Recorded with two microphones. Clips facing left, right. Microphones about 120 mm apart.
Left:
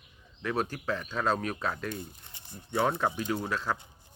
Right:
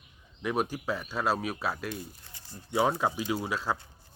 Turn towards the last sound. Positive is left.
turn(degrees=-10)  # may be behind; listen again after turning